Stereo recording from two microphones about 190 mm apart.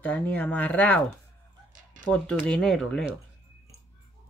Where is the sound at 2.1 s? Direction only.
5° left (ahead or behind).